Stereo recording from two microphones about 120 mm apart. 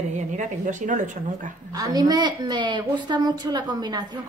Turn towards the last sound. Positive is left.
turn(degrees=-35)  # may be behind; listen again after turning